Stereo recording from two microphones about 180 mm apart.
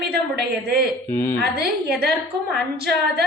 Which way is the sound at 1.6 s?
60° right (ahead or behind).